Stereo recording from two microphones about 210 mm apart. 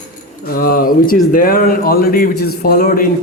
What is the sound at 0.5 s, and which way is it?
A man's voice, 45° left (ahead or behind).